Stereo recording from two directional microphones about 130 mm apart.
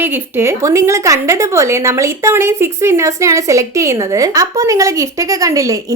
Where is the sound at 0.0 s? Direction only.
20° right (ahead or behind).